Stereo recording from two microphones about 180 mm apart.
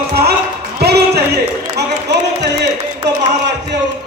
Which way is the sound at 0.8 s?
65° right (ahead or behind).